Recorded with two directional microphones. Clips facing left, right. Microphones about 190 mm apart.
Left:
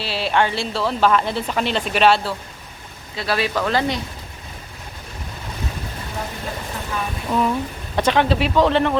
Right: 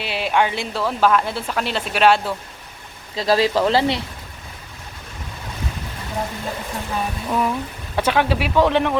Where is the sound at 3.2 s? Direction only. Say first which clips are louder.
Right 5 dB; 35° right (ahead or behind).